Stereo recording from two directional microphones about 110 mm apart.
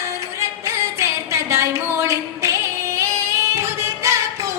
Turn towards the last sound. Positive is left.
turn(degrees=-25)  # may be behind; listen again after turning